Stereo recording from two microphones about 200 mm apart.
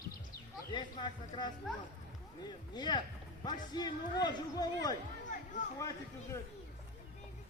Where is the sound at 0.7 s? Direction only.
20° left (ahead or behind).